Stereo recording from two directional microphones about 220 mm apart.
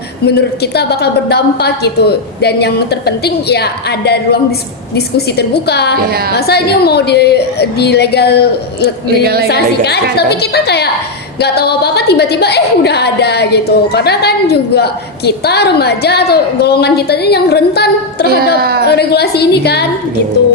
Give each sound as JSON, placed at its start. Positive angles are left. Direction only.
{"t": 0.3, "sound": "a woman's voice", "side_deg": 45}
{"t": 9.2, "sound": "a woman's voice", "side_deg": -45}
{"t": 9.5, "sound": "a woman's voice", "side_deg": 50}
{"t": 18.6, "sound": "a woman's voice", "side_deg": -45}
{"t": 18.9, "sound": "a woman's voice", "side_deg": 50}